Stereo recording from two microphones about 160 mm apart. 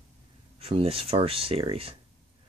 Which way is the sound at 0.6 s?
35° right (ahead or behind).